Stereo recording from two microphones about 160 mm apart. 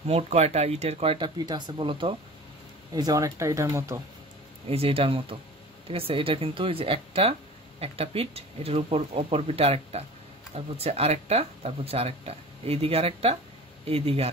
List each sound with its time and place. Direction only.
0.1 s speech: 45° right (ahead or behind); by 4.0 s 20° right (ahead or behind)
4.6 s speech: 35° right (ahead or behind)